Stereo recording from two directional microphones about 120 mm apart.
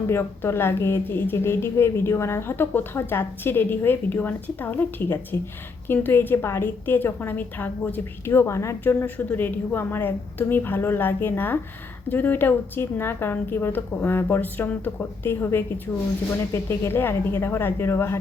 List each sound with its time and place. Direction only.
0.1 s a woman's voice: 20° left (ahead or behind)